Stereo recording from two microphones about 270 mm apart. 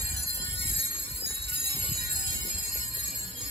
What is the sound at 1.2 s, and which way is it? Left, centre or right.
Jingle bell, right.